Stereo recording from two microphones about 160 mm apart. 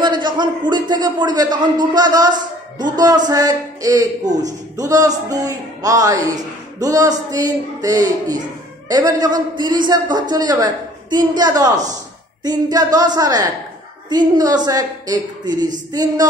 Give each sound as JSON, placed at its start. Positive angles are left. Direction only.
{"t": 0.0, "sound": "a man's voice", "side_deg": -30}